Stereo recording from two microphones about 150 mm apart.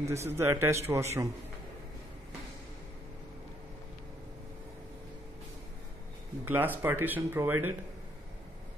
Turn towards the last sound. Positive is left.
turn(degrees=-15)  # may be behind; listen again after turning